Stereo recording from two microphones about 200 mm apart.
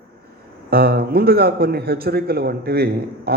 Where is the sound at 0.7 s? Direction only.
50° right (ahead or behind).